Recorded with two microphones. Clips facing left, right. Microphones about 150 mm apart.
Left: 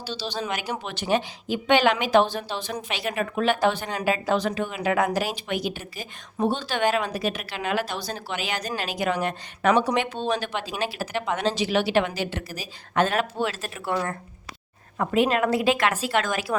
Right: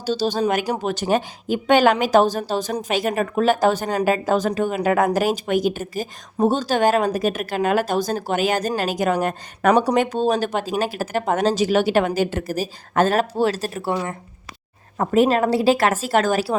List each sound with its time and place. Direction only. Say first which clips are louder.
0.0 s a woman's voice: right 10 dB; 45° right (ahead or behind)
13.9 s speech: left 1 dB; 20° right (ahead or behind)
14.9 s speech: right 5 dB; 40° right (ahead or behind)